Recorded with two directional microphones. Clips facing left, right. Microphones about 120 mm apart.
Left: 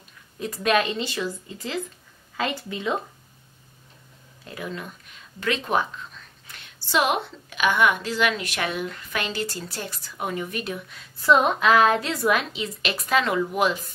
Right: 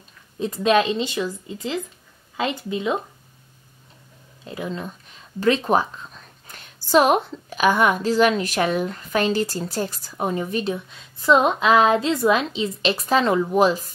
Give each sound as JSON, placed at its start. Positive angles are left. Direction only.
{"t": 0.4, "sound": "speech", "side_deg": -25}
{"t": 4.5, "sound": "speech", "side_deg": -25}